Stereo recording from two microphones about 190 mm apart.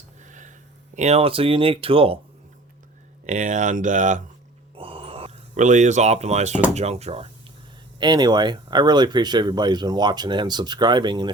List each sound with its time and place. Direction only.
0.2 s a sound: 40° right (ahead or behind)
0.9 s speech: 35° right (ahead or behind)
3.2 s speech: 40° right (ahead or behind)
4.8 s a sound: 30° right (ahead or behind)
6.7 s speech: 35° right (ahead or behind)
7.9 s speech: 20° right (ahead or behind)